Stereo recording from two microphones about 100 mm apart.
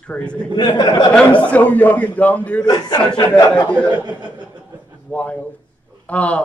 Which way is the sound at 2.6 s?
45° left (ahead or behind).